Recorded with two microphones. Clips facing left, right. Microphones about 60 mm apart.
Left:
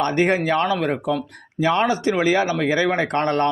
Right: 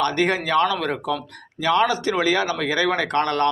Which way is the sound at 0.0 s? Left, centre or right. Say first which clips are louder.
Left 2 dB; left.